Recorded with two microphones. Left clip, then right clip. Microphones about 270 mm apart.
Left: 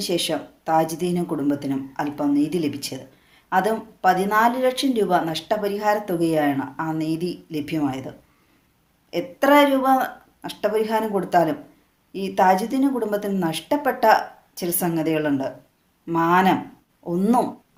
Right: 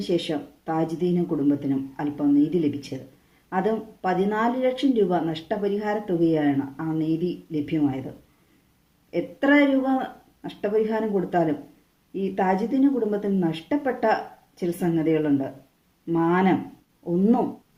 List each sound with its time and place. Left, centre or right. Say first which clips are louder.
0.1 s speech: even; left